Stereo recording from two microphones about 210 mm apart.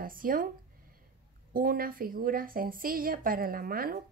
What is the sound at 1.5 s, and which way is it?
Speech, 45° right (ahead or behind).